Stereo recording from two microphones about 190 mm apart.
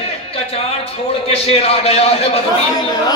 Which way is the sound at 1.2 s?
30° left (ahead or behind).